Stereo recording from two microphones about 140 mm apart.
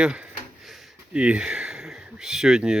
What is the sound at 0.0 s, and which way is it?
Speech, 5° right (ahead or behind).